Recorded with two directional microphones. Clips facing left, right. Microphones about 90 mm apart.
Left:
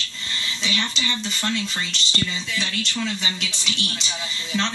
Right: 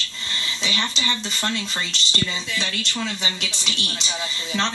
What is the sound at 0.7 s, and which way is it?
Speech, 30° right (ahead or behind).